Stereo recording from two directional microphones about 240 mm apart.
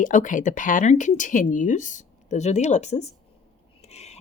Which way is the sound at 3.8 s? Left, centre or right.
Left.